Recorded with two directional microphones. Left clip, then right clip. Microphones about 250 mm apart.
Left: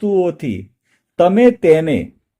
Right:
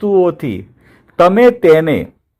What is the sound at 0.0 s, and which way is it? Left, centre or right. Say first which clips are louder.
Speech: right 4 dB; centre.